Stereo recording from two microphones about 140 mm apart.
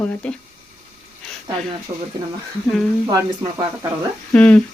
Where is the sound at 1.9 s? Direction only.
40° right (ahead or behind).